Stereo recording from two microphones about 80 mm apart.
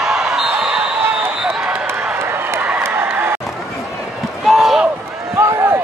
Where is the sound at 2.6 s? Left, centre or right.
Right.